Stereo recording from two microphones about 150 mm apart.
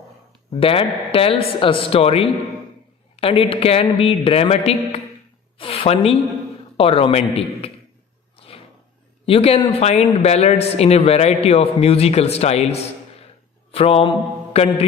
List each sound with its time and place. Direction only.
0.6 s a man's voice: 40° left (ahead or behind)
9.2 s a man's voice: 40° left (ahead or behind)
13.7 s mantra: 40° left (ahead or behind)